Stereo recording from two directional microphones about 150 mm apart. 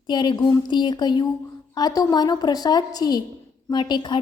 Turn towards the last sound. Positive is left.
turn(degrees=30)  # may be behind; listen again after turning